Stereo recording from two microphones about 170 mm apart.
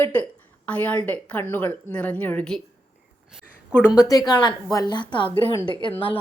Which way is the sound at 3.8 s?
5° right (ahead or behind).